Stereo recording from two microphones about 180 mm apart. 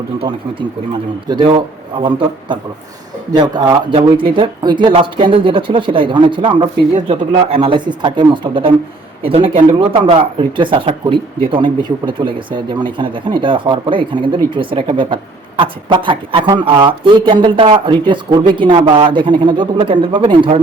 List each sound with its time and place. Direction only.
1.3 s speech: 25° right (ahead or behind)